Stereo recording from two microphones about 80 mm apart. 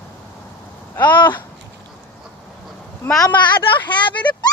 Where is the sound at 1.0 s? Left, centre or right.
Left.